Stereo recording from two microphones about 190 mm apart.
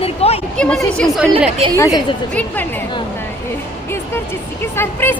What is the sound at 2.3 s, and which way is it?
Speech, 10° left (ahead or behind).